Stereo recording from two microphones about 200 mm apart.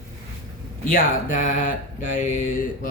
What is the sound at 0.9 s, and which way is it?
Speech, 40° left (ahead or behind).